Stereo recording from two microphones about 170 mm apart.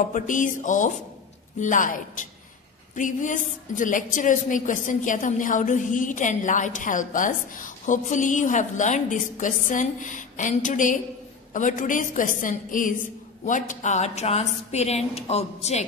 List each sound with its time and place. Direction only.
0.1 s a woman's voice: 50° left (ahead or behind)